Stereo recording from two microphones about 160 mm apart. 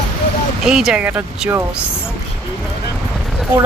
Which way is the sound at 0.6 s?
Centre (ahead or behind).